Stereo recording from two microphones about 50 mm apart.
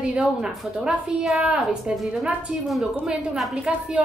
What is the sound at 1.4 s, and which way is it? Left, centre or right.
Speech, centre.